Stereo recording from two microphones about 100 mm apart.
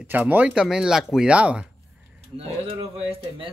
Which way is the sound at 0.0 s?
20° right (ahead or behind).